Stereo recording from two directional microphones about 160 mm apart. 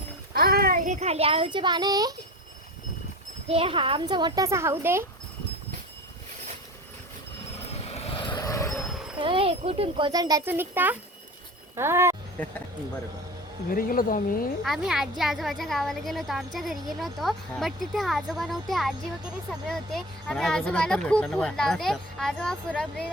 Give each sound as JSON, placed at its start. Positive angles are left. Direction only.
{"t": 0.3, "sound": "a child's voice", "side_deg": -70}
{"t": 3.5, "sound": "speech", "side_deg": -35}
{"t": 7.7, "sound": "vehicle", "side_deg": 40}
{"t": 8.7, "sound": "roaring cats", "side_deg": 0}
{"t": 9.2, "sound": "a child's voice", "side_deg": -35}
{"t": 10.1, "sound": "a child's voice", "side_deg": -25}
{"t": 13.7, "sound": "speech", "side_deg": 65}
{"t": 14.6, "sound": "speech", "side_deg": 0}